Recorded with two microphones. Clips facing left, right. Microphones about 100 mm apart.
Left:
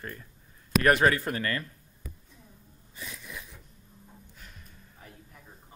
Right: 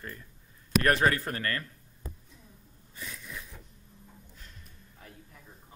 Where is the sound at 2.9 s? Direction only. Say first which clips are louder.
Even; 15° left (ahead or behind).